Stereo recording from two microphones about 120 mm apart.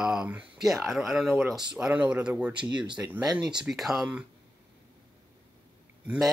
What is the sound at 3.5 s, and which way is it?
Speech, 5° right (ahead or behind).